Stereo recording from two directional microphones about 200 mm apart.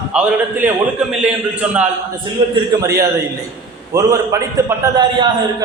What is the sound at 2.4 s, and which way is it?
Speech, 25° right (ahead or behind).